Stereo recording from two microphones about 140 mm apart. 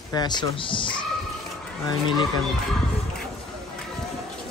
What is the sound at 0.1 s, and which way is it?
Speech, 30° left (ahead or behind).